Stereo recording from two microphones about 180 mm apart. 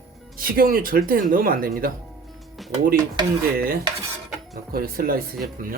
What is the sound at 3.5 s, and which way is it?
Cutlery, 55° right (ahead or behind).